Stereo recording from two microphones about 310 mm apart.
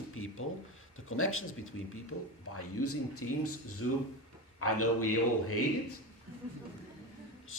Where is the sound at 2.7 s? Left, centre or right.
Left.